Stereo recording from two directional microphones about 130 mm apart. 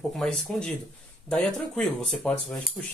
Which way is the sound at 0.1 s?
5° left (ahead or behind).